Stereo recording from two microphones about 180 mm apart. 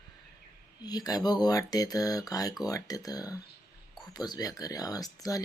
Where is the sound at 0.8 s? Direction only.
20° left (ahead or behind).